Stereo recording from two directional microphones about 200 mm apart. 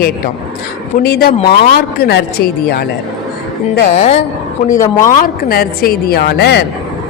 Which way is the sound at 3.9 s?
35° left (ahead or behind).